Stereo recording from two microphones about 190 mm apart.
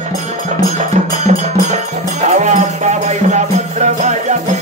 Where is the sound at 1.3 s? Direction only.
40° right (ahead or behind).